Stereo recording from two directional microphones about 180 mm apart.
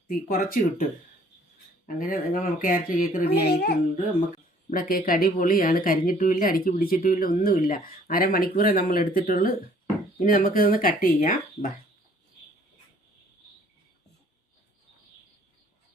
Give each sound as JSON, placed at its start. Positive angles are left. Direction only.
{"t": 0.1, "sound": "a woman's voice", "side_deg": 50}
{"t": 2.0, "sound": "a woman's voice", "side_deg": 50}
{"t": 4.7, "sound": "a woman's voice", "side_deg": 50}